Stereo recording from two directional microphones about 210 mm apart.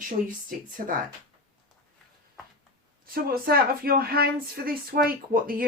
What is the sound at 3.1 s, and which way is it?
Speech, 45° right (ahead or behind).